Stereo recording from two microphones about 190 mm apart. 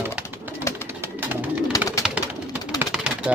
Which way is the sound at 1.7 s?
15° left (ahead or behind).